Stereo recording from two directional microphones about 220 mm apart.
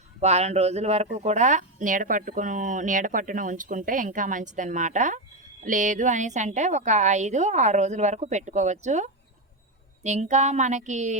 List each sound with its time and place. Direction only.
0.2 s speech: 30° right (ahead or behind)